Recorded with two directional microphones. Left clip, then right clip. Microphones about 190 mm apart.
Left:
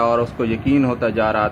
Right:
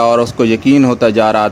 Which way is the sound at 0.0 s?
50° right (ahead or behind).